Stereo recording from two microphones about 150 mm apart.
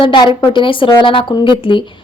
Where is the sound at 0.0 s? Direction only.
30° left (ahead or behind).